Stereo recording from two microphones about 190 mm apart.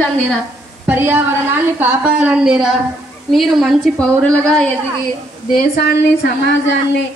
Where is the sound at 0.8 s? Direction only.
10° right (ahead or behind).